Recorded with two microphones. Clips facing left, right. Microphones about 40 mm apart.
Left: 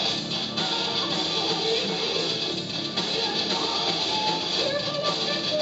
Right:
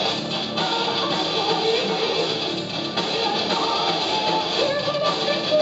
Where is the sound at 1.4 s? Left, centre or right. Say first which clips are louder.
Right 6 dB; centre.